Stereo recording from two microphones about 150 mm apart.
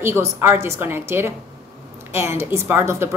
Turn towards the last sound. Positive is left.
turn(degrees=-15)  # may be behind; listen again after turning